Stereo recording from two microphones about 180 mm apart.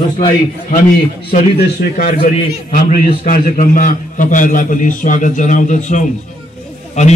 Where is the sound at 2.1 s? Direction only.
55° left (ahead or behind).